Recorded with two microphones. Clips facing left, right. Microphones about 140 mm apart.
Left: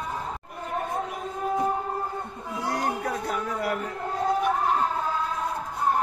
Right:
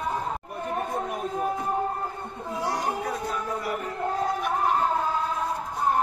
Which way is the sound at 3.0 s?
55° left (ahead or behind).